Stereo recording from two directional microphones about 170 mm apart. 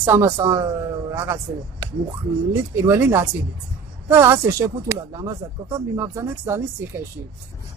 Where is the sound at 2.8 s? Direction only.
15° right (ahead or behind).